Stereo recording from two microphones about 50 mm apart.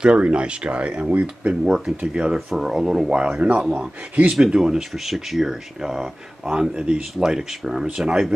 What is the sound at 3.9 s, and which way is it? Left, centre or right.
Speech, right.